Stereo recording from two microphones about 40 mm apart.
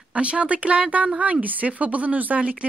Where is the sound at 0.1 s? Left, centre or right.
Right.